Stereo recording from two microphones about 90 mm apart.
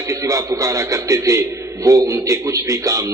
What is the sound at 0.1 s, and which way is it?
A man's voice, 35° right (ahead or behind).